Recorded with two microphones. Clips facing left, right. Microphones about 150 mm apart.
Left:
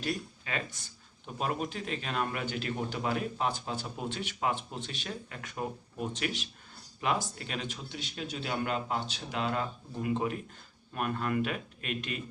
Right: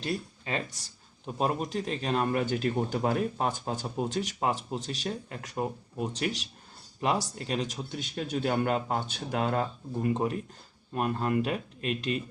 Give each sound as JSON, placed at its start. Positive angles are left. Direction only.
{"t": 0.0, "sound": "speech", "side_deg": -30}
{"t": 10.9, "sound": "speech", "side_deg": -30}